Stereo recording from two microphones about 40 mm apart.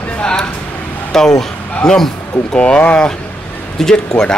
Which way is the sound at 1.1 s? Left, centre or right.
Centre.